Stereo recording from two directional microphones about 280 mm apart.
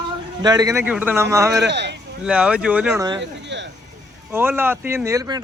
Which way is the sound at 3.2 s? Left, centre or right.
Right.